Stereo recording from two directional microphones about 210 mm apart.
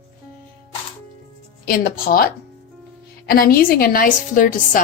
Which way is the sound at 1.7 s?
45° left (ahead or behind).